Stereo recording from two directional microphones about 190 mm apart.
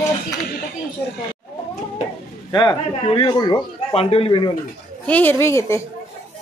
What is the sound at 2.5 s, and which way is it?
Speech, 25° left (ahead or behind).